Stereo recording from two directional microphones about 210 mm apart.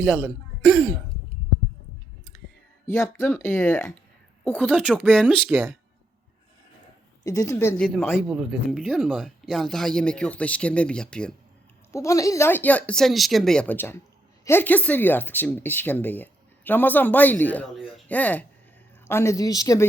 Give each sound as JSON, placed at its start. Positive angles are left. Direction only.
{"t": 0.0, "sound": "speech", "side_deg": 0}
{"t": 2.8, "sound": "speech", "side_deg": 10}
{"t": 7.3, "sound": "speech", "side_deg": 15}